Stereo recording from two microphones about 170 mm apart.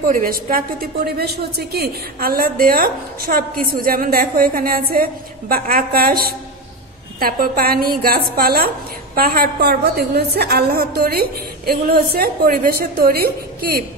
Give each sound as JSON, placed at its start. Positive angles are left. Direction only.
{"t": 0.0, "sound": "a woman's voice", "side_deg": -55}